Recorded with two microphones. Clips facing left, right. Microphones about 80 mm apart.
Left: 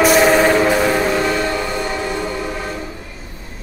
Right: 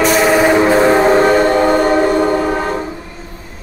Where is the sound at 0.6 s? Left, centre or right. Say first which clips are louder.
Right 5 dB; right.